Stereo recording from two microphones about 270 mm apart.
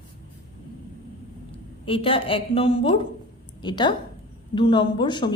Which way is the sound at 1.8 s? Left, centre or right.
Centre.